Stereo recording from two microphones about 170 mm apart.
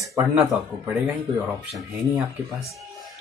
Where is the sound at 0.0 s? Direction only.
20° right (ahead or behind).